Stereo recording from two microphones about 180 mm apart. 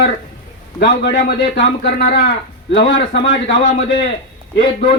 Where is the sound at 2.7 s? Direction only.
85° left.